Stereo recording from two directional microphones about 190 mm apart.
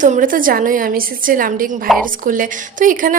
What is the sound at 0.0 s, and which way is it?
A woman's voice, 45° right (ahead or behind).